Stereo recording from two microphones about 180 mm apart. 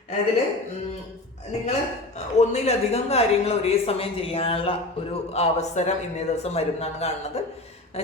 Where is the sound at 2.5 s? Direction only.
35° left (ahead or behind).